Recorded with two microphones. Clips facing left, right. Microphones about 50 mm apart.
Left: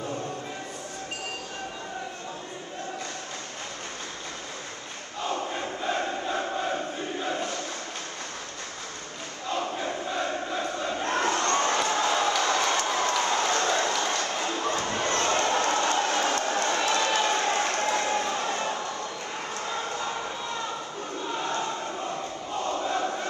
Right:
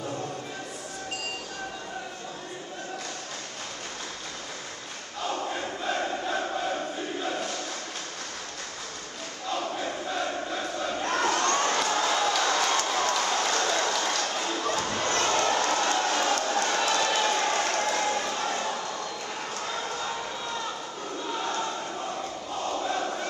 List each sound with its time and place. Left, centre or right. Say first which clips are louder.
7.2 s crowd: left 2 dB; left
10.1 s crowd: left 1 dB; left
21.4 s crowd: left 1 dB; left
22.7 s crowd: left 1 dB; left